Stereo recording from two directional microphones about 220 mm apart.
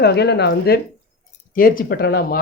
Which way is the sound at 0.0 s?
50° left (ahead or behind).